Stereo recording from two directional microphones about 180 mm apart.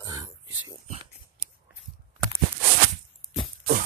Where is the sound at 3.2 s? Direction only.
20° right (ahead or behind).